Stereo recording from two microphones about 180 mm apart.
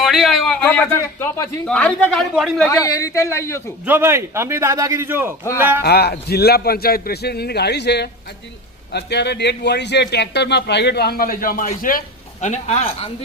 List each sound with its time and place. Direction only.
0.0 s a man's voice: centre (ahead or behind)
2.6 s a man's voice: 20° left (ahead or behind)
3.8 s a man's voice: 15° right (ahead or behind)
5.8 s a man's voice: 60° left (ahead or behind); by 13.1 s 35° left (ahead or behind)